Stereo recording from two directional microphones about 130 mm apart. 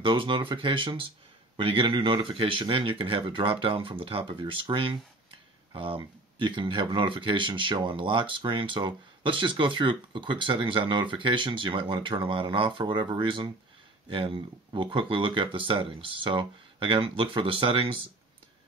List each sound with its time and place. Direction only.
0.0 s speech: 40° right (ahead or behind)